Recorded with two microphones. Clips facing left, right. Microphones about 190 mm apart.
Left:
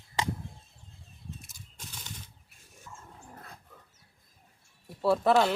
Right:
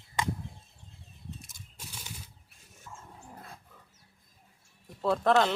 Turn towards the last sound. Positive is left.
turn(degrees=5)  # may be behind; listen again after turning